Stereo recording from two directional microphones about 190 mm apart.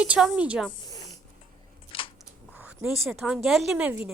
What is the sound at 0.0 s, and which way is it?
Speech, 5° right (ahead or behind).